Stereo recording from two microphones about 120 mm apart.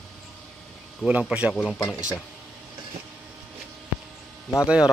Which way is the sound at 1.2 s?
10° right (ahead or behind).